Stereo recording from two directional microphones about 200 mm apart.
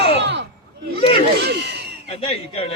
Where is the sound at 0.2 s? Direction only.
60° right (ahead or behind).